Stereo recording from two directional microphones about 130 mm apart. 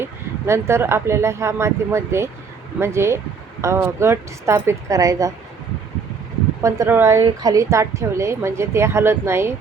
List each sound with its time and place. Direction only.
0.0 s a woman's voice: 20° right (ahead or behind)
6.6 s a woman's voice: 25° right (ahead or behind)